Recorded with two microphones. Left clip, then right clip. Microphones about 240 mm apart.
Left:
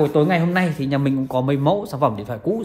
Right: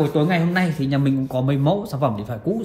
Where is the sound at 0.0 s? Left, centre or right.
Left.